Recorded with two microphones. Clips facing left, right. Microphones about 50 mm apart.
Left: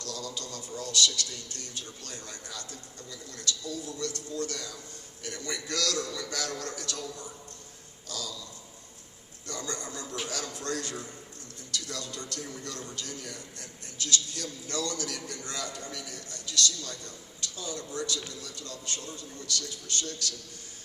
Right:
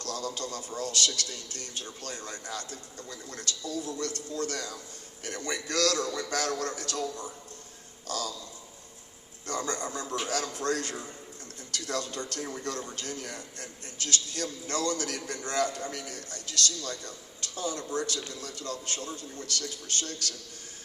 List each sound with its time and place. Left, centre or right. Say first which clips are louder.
0.0 s a man's voice: right 4 dB; right
9.5 s a man's voice: right 5 dB; right